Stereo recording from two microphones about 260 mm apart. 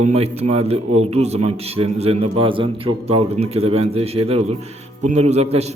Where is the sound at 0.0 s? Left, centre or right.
Right.